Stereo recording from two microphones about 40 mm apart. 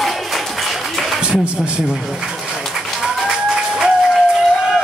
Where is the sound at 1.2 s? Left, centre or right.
Right.